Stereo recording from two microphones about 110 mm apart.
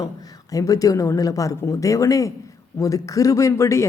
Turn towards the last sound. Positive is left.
turn(degrees=25)  # may be behind; listen again after turning